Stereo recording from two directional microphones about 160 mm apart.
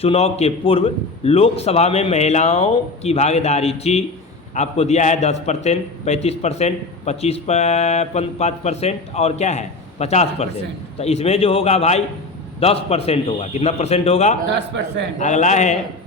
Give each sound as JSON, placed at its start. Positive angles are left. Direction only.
{"t": 0.0, "sound": "a man's voice", "side_deg": 40}
{"t": 14.5, "sound": "a man's voice", "side_deg": -90}
{"t": 15.2, "sound": "a man's voice", "side_deg": 50}